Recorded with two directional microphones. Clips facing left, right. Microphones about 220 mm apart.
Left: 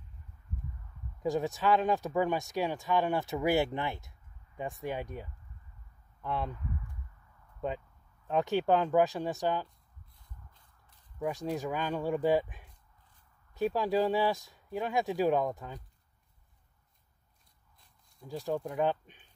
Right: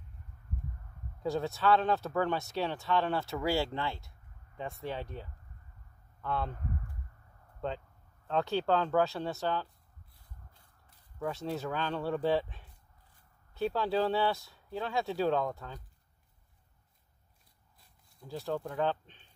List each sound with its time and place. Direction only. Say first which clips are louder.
1.2 s speech: left 1 dB; 15° left (ahead or behind)
6.5 s a sound: right 1 dB; 45° right (ahead or behind)
8.3 s speech: left 2 dB; 15° left (ahead or behind)
11.1 s speech: left 2 dB; 15° left (ahead or behind)
18.4 s speech: left 2 dB; 15° left (ahead or behind)